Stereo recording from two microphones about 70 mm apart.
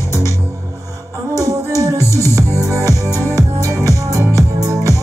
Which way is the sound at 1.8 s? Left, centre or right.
Right.